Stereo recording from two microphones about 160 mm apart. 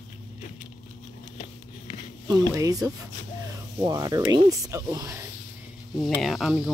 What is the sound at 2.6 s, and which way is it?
Speech, 20° right (ahead or behind).